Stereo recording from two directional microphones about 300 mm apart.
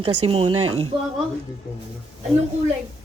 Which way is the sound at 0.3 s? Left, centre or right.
Centre.